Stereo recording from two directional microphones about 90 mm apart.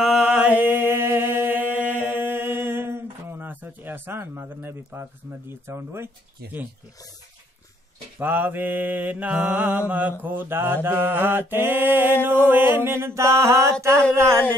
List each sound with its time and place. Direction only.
0.0 s mantra: 10° right (ahead or behind); by 6.0 s 30° right (ahead or behind)
8.2 s mantra: 20° right (ahead or behind)